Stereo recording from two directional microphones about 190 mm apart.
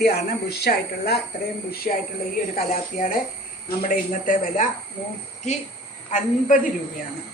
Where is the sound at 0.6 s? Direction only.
60° left (ahead or behind).